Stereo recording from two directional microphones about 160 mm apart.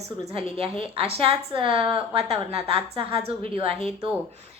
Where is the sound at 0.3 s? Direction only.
40° right (ahead or behind).